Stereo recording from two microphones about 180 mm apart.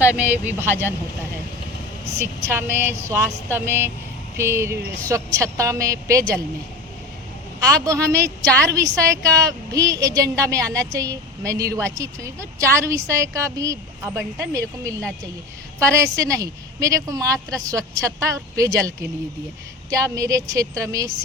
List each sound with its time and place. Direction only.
0.1 s a woman's voice: 10° right (ahead or behind)
2.1 s a woman's voice: 15° right (ahead or behind)
7.7 s a woman's voice: 20° right (ahead or behind)